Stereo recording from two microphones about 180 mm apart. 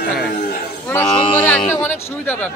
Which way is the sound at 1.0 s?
30° left (ahead or behind).